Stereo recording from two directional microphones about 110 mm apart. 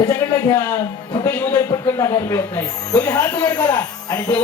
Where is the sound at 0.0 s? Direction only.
30° left (ahead or behind).